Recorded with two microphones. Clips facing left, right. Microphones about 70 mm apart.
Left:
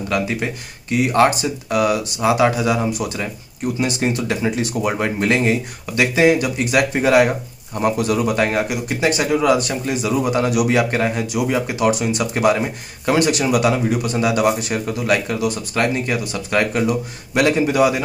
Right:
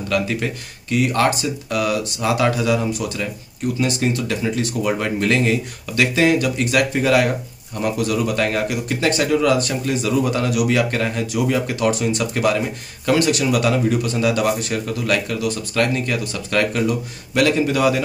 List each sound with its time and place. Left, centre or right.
0.1 s speech: centre